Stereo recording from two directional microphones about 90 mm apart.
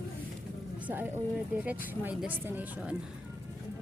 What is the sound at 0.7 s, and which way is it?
A woman's voice, 20° right (ahead or behind).